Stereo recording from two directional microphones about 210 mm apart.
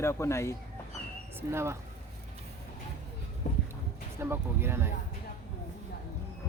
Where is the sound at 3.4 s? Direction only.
35° left (ahead or behind).